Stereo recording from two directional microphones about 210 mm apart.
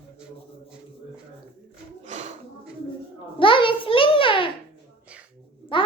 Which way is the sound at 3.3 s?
25° left (ahead or behind).